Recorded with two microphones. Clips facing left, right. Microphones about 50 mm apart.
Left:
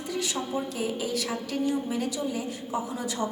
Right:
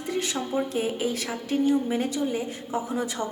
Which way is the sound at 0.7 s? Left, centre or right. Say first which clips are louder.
Right 3 dB; right.